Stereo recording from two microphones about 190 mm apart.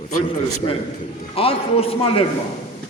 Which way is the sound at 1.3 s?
30° left (ahead or behind).